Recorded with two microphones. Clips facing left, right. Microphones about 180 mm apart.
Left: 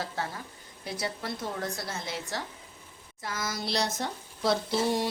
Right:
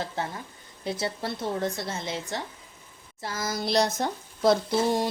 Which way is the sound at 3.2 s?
30° right (ahead or behind).